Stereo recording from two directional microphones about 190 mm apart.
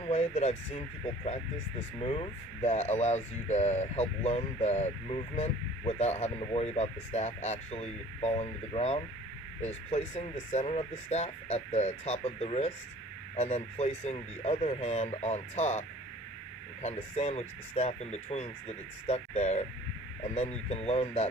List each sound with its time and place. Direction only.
0.0 s speech: 35° left (ahead or behind)
2.0 s speech: 30° left (ahead or behind)
16.8 s speech: 35° left (ahead or behind)